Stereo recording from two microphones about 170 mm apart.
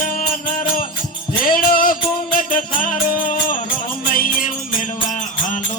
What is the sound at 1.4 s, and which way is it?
Music, 55° left (ahead or behind).